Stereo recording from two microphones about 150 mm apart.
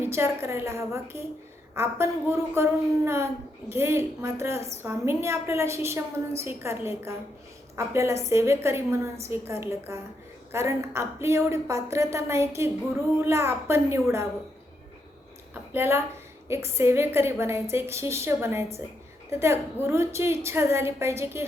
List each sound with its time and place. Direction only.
0.0 s a woman's voice: 15° right (ahead or behind)
15.7 s a woman's voice: 15° right (ahead or behind)